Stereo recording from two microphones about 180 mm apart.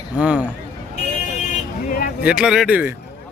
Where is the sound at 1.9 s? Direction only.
50° left (ahead or behind).